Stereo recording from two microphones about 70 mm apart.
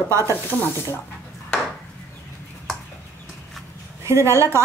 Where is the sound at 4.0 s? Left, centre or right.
Right.